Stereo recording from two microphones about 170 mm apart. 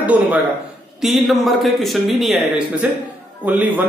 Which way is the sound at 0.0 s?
10° right (ahead or behind).